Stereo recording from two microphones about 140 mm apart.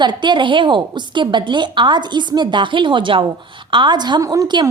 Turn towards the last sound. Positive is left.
turn(degrees=-30)  # may be behind; listen again after turning